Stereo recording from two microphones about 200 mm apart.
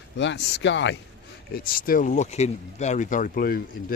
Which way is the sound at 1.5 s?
45° left (ahead or behind).